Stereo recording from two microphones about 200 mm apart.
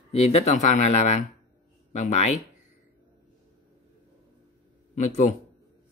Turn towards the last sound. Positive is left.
turn(degrees=35)  # may be behind; listen again after turning